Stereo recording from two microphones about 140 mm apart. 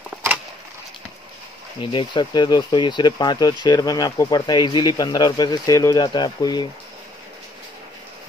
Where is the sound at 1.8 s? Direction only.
35° left (ahead or behind).